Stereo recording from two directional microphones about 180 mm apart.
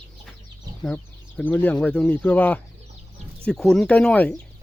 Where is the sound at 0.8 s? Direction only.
5° left (ahead or behind).